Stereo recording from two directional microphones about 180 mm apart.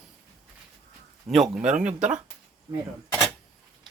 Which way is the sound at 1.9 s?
40° right (ahead or behind).